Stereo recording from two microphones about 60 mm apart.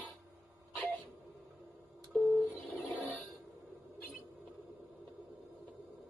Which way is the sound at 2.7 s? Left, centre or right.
Left.